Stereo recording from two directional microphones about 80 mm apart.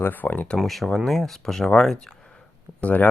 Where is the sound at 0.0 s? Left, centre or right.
Left.